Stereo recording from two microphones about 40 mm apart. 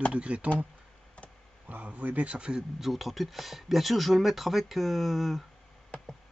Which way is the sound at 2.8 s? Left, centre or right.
Centre.